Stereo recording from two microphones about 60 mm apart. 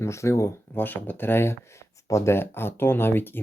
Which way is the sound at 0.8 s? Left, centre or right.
Left.